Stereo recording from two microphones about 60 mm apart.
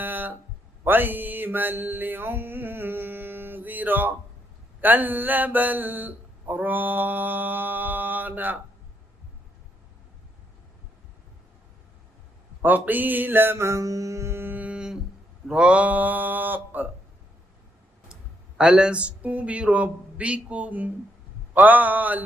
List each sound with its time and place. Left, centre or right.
0.0 s a sound: right
0.9 s mantra: right
4.8 s a sound: right
12.6 s mantra: right
15.4 s speech: centre
18.1 s speech: centre